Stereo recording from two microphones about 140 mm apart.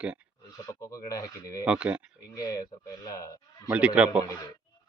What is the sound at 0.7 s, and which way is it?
Speech, 25° left (ahead or behind).